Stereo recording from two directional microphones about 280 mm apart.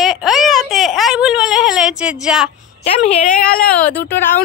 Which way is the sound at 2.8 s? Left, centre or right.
Left.